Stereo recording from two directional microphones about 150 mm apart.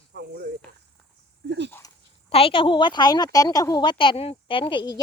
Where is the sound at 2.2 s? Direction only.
40° left (ahead or behind).